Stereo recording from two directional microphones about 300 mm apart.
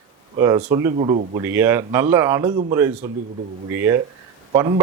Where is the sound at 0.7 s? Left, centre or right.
Centre.